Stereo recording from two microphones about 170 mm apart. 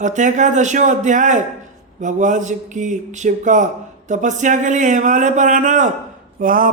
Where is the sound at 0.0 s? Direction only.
45° right (ahead or behind).